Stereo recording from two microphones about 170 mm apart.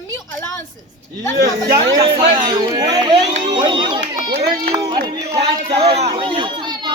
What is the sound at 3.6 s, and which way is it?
Speech, 25° right (ahead or behind).